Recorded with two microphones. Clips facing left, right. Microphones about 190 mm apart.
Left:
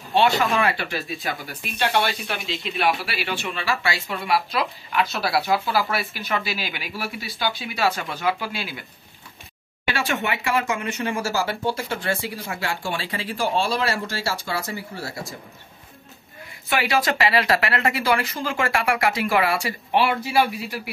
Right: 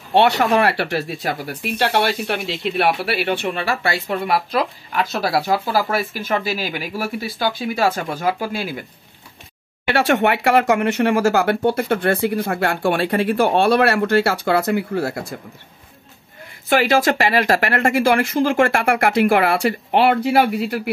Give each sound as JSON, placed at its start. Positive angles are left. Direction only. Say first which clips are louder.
{"t": 0.1, "sound": "speech", "louder": "right 5 dB", "side_deg": -65}
{"t": 9.9, "sound": "speech", "louder": "right 10 dB", "side_deg": -65}
{"t": 16.6, "sound": "speech", "louder": "right 6 dB", "side_deg": -50}